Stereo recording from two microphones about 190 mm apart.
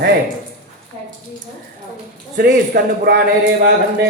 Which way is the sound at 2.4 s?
55° right (ahead or behind).